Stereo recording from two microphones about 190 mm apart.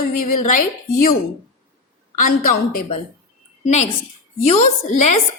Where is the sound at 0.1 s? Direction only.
45° left (ahead or behind).